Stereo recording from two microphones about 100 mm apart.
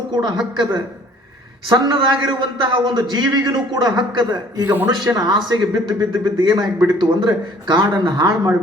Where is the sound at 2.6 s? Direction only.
50° right (ahead or behind).